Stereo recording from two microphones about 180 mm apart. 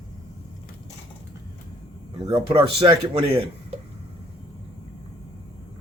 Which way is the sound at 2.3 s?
30° right (ahead or behind).